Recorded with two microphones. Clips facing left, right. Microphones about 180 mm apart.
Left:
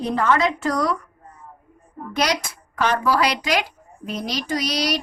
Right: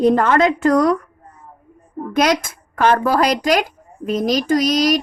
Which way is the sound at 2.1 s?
50° right (ahead or behind).